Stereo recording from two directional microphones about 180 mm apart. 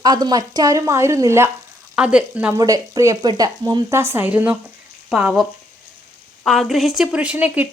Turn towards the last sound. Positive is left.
turn(degrees=-5)  # may be behind; listen again after turning